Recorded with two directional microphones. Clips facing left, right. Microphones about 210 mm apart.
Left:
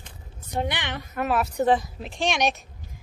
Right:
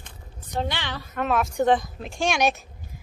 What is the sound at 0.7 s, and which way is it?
Speech, 20° left (ahead or behind).